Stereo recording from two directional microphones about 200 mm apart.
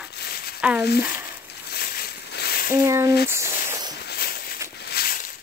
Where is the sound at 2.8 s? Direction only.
15° right (ahead or behind).